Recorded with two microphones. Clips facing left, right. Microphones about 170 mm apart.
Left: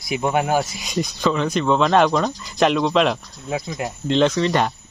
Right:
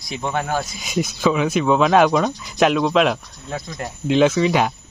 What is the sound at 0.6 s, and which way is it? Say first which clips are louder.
Speech: even; centre (ahead or behind).